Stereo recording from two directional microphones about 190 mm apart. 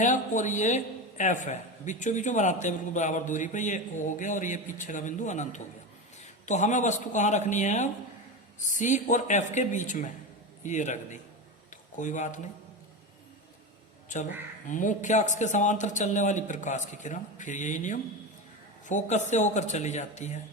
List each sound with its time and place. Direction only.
0.0 s a man's voice: 40° left (ahead or behind)
14.1 s a man's voice: 40° left (ahead or behind)